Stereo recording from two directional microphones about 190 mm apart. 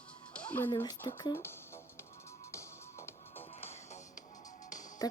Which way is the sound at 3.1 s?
15° left (ahead or behind).